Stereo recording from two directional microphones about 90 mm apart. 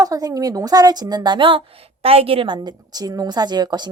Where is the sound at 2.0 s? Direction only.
90° right.